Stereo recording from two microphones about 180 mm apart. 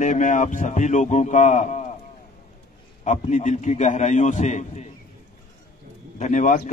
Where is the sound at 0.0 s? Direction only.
45° left (ahead or behind).